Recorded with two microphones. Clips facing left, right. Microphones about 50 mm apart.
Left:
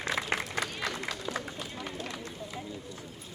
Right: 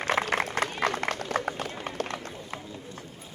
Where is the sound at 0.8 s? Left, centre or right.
Right.